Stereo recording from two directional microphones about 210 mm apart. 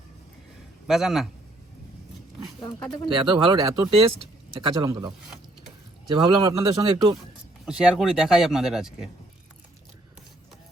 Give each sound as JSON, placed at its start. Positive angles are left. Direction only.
{"t": 0.9, "sound": "speech", "side_deg": 0}
{"t": 2.6, "sound": "speech", "side_deg": 15}
{"t": 3.2, "sound": "a man's voice", "side_deg": -20}
{"t": 7.6, "sound": "speech", "side_deg": -5}